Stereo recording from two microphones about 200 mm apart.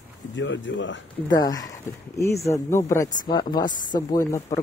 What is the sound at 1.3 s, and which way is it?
Speech, 20° left (ahead or behind).